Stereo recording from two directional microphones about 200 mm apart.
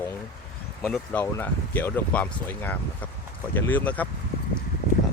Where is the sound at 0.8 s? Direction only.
5° left (ahead or behind).